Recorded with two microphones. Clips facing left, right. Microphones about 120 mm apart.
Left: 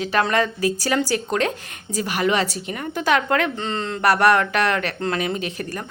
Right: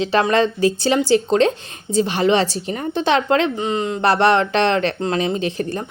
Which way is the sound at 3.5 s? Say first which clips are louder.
Right 5 dB; 15° right (ahead or behind).